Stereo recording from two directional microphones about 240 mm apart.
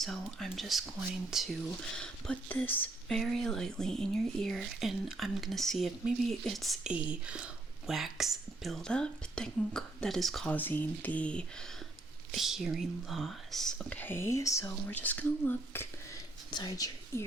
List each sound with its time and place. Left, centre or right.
0.0 s speech: centre